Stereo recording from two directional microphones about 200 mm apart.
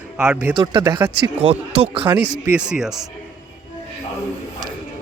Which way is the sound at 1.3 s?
30° right (ahead or behind).